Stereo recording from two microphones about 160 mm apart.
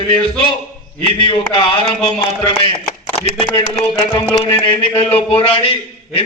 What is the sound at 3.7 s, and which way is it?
A man's voice, 25° left (ahead or behind).